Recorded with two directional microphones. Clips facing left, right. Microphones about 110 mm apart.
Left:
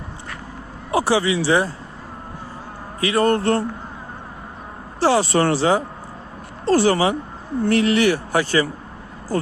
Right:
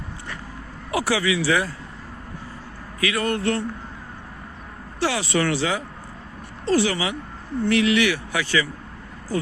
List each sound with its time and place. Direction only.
0.9 s speech: 30° left (ahead or behind)
3.0 s speech: 35° left (ahead or behind)
4.9 s speech: 35° left (ahead or behind)